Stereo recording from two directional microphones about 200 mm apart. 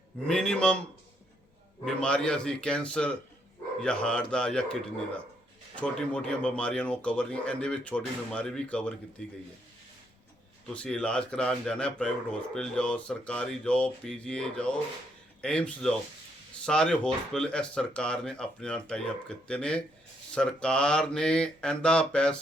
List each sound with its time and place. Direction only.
0.3 s speech: 5° left (ahead or behind)
1.8 s speech: 5° left (ahead or behind)
10.8 s speech: 5° left (ahead or behind)